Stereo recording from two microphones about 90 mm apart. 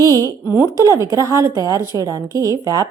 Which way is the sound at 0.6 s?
40° right (ahead or behind).